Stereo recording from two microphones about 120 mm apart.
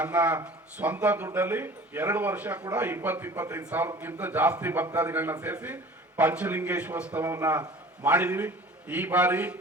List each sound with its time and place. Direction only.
0.0 s a man's voice: 15° right (ahead or behind)